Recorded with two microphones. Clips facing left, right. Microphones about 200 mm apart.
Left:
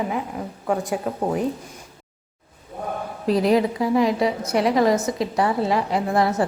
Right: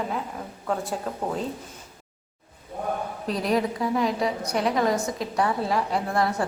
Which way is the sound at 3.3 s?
Centre (ahead or behind).